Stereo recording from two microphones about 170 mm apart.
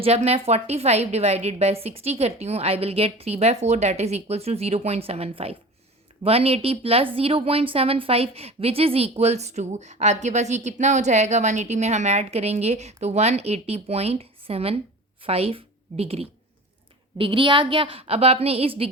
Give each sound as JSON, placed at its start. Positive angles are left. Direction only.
{"t": 0.0, "sound": "a woman's voice", "side_deg": -40}